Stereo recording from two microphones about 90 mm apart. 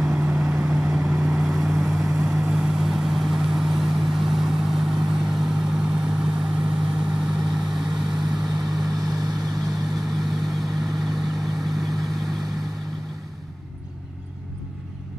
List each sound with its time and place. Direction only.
0.0 s vehicle: 10° right (ahead or behind)
8.9 s vehicle: 45° right (ahead or behind)
9.7 s vehicle: centre (ahead or behind)